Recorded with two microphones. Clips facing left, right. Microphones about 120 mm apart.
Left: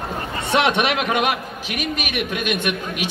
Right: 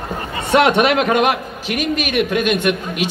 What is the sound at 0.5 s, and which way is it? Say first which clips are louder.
Speech: right 6 dB; 45° right (ahead or behind).